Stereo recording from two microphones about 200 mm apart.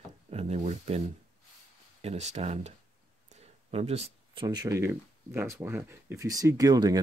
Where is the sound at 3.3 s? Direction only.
30° right (ahead or behind).